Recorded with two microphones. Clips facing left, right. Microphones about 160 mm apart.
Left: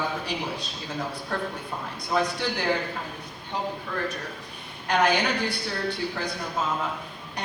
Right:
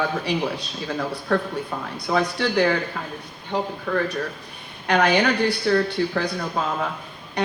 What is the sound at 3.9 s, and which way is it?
A woman's voice, 60° right (ahead or behind).